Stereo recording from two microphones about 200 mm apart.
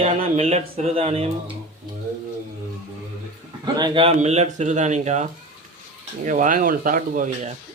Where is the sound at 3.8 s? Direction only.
25° right (ahead or behind); by 7.5 s 40° right (ahead or behind).